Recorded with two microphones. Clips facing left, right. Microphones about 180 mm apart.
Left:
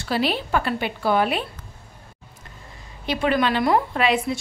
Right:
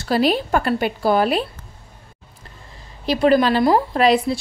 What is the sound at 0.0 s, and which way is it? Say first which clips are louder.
A woman's voice: right 5 dB; 40° right (ahead or behind).